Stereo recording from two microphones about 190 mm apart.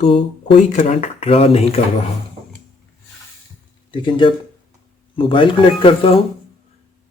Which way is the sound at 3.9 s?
25° left (ahead or behind).